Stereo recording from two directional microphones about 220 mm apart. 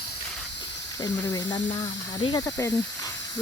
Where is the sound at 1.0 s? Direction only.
15° left (ahead or behind).